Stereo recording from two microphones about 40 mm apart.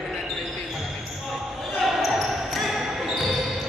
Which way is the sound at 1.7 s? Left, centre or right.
Centre.